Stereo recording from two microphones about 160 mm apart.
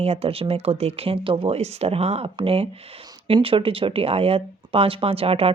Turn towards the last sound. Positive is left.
turn(degrees=-35)  # may be behind; listen again after turning